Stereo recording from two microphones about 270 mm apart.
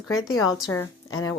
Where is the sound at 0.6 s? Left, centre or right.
Centre.